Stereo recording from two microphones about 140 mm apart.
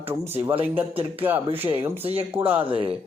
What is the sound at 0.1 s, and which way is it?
Speech, 15° right (ahead or behind).